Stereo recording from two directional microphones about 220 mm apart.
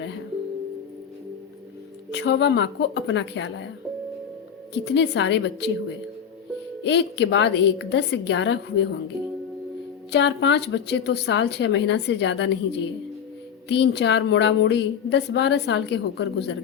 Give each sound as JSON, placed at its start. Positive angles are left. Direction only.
{"t": 2.1, "sound": "a woman's voice", "side_deg": 50}
{"t": 4.7, "sound": "a woman's voice", "side_deg": 50}
{"t": 6.8, "sound": "a woman's voice", "side_deg": 55}
{"t": 10.1, "sound": "a woman's voice", "side_deg": 55}
{"t": 13.7, "sound": "a woman's voice", "side_deg": 50}